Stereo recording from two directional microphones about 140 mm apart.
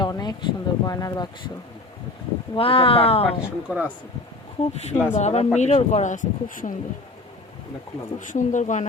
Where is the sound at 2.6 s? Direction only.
40° left (ahead or behind).